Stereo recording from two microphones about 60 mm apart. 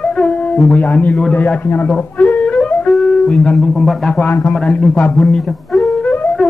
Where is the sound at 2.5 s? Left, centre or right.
Centre.